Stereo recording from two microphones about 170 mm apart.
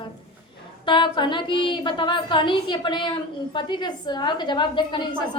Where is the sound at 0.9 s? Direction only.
30° left (ahead or behind).